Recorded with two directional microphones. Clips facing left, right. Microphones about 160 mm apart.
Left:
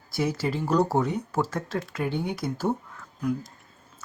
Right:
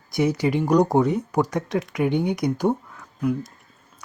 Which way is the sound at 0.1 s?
20° right (ahead or behind).